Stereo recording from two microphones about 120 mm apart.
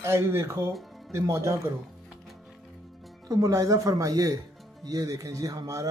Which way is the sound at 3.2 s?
30° right (ahead or behind).